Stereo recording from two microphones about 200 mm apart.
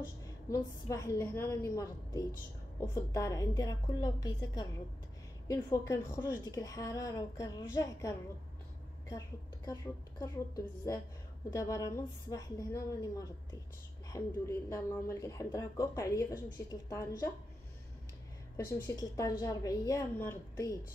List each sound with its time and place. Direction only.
0.2 s a woman's voice: 15° left (ahead or behind)
9.7 s a woman's voice: 20° left (ahead or behind)
18.7 s a woman's voice: 15° left (ahead or behind)